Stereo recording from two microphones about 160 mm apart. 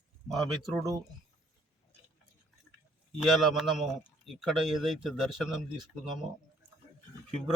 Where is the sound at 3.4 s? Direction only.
Centre (ahead or behind).